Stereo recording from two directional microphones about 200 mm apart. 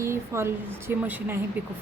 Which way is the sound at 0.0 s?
15° right (ahead or behind).